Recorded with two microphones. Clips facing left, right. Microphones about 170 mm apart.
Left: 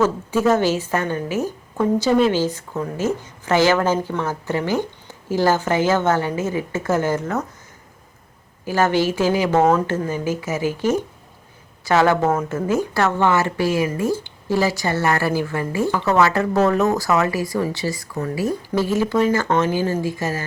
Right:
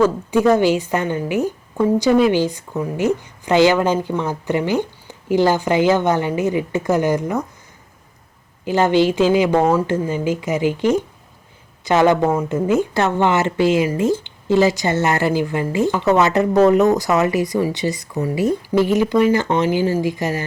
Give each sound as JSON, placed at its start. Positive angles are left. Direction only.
{"t": 0.0, "sound": "a woman's voice", "side_deg": -15}
{"t": 8.6, "sound": "a woman's voice", "side_deg": -20}